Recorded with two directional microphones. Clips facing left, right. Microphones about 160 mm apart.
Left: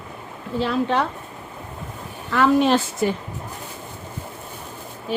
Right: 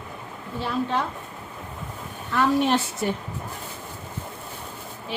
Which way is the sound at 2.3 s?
90° left.